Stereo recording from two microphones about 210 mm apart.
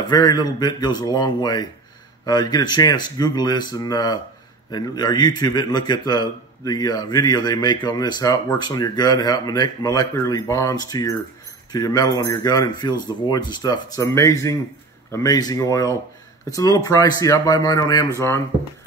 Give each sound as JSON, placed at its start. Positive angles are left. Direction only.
{"t": 0.0, "sound": "a man's voice", "side_deg": 20}